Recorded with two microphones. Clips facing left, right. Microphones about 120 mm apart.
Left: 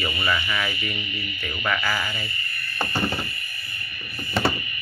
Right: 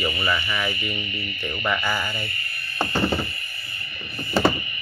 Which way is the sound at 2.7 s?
25° right (ahead or behind).